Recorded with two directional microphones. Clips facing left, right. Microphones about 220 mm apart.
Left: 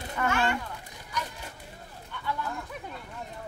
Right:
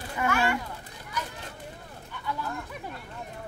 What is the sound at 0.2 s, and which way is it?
Speech, 10° right (ahead or behind).